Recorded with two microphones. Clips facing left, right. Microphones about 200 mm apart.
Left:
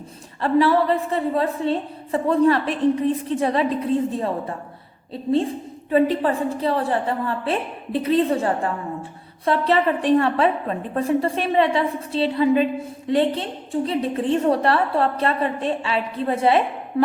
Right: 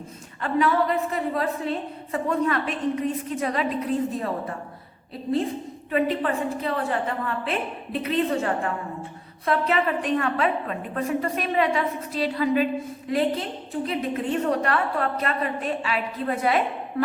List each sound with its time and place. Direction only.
0.4 s a woman's voice: 35° left (ahead or behind)